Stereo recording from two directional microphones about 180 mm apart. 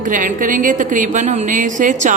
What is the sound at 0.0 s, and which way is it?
A woman's voice, 45° right (ahead or behind).